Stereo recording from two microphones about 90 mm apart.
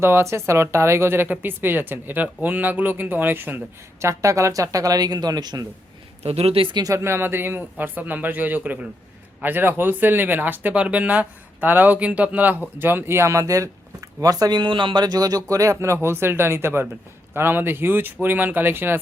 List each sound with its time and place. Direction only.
0.0 s speech: 30° right (ahead or behind)
4.0 s speech: 35° right (ahead or behind)
6.4 s speech: 90° right
6.9 s speech: 30° right (ahead or behind); by 14.6 s 45° right (ahead or behind)
14.6 s speech: 65° right (ahead or behind); by 18.9 s 25° right (ahead or behind)